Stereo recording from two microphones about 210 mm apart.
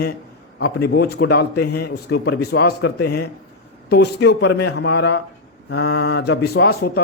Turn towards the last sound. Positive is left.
turn(degrees=50)  # may be behind; listen again after turning